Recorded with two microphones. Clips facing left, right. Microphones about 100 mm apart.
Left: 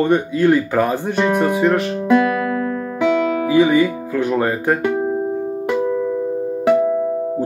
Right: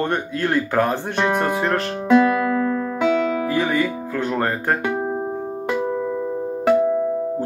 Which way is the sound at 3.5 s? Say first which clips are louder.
Left 7 dB; 10° left (ahead or behind).